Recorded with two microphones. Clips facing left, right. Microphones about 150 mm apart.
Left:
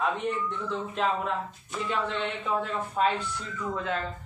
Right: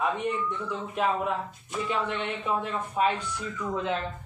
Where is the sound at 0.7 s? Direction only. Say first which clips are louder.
Even; 10° right (ahead or behind).